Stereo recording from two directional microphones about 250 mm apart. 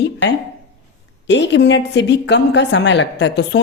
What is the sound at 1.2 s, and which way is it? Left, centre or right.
A woman's voice, left.